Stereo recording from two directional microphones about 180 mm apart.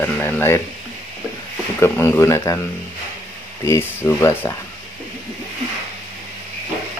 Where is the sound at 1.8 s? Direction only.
15° left (ahead or behind).